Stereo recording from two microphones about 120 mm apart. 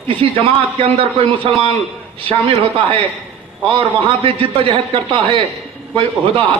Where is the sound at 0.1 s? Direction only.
45° right (ahead or behind).